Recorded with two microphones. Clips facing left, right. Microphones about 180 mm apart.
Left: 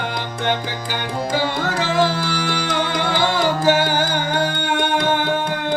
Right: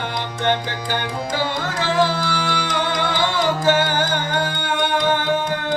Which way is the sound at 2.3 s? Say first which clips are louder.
Left 1 dB; 45° left (ahead or behind).